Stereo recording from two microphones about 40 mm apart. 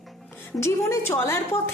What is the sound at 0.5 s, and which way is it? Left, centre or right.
A woman's voice, left.